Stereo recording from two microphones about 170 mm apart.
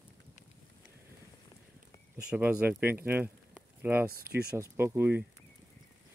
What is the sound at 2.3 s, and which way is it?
Speech, 10° right (ahead or behind).